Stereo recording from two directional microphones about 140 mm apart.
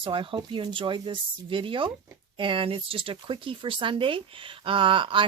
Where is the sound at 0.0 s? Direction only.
40° right (ahead or behind).